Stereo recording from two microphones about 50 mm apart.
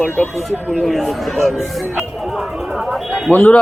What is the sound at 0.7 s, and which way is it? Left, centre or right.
Speech, centre.